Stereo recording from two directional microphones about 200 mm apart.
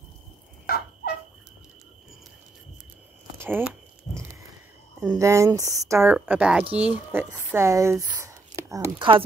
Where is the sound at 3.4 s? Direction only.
10° right (ahead or behind).